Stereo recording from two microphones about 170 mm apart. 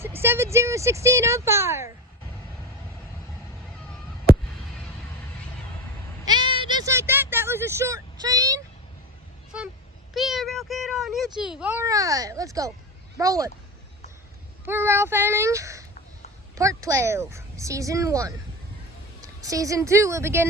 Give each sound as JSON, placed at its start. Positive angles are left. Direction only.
{"t": 0.2, "sound": "speech", "side_deg": -15}
{"t": 6.2, "sound": "a sound", "side_deg": -25}
{"t": 10.2, "sound": "a sound", "side_deg": 0}
{"t": 11.3, "sound": "a child's voice", "side_deg": -5}
{"t": 11.9, "sound": "speech", "side_deg": -20}
{"t": 14.6, "sound": "a child's voice", "side_deg": -15}
{"t": 19.4, "sound": "speech", "side_deg": -20}